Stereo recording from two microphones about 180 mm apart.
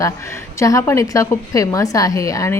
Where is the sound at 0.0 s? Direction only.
15° left (ahead or behind).